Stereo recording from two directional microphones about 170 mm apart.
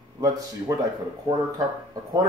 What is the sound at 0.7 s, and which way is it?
Speech, 20° right (ahead or behind).